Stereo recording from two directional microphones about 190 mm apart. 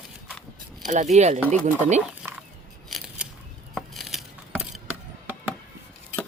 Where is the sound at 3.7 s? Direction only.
Centre (ahead or behind).